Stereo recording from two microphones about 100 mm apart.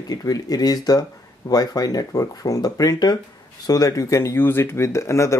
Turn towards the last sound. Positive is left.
turn(degrees=30)  # may be behind; listen again after turning